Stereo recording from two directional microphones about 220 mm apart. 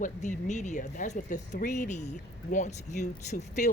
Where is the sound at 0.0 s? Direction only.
35° left (ahead or behind).